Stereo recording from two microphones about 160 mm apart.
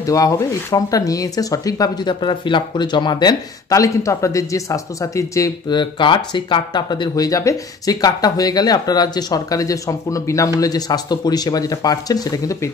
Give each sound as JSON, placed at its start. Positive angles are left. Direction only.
{"t": 0.0, "sound": "speech", "side_deg": 20}